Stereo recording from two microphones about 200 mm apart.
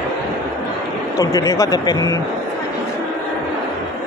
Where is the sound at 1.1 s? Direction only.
15° left (ahead or behind).